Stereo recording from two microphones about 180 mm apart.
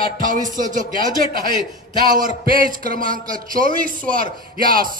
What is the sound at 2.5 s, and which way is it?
A man's voice, 50° right (ahead or behind).